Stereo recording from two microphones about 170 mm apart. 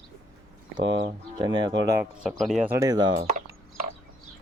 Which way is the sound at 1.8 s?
15° right (ahead or behind).